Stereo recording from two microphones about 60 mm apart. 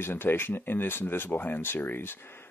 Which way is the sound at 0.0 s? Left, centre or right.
Left.